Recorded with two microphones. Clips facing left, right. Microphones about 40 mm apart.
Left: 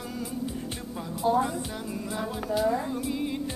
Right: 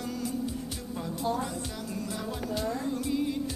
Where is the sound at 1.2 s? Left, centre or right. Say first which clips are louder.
Left 7 dB; centre.